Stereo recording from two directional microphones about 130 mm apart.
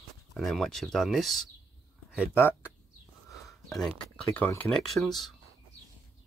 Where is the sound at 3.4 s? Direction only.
Centre (ahead or behind).